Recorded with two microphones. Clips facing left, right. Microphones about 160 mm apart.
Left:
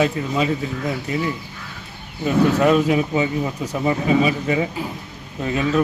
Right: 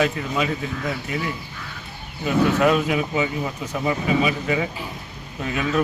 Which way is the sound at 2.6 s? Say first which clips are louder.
Left 3 dB; 30° left (ahead or behind).